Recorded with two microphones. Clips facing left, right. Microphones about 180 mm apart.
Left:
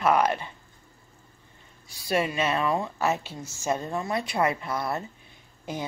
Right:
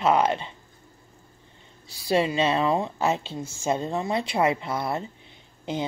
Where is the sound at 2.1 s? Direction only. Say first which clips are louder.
Right 3 dB; 25° right (ahead or behind).